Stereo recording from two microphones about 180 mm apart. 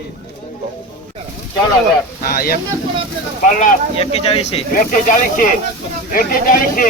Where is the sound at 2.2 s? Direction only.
55° left (ahead or behind).